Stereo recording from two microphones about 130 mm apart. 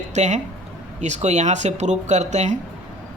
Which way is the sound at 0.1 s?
65° right (ahead or behind).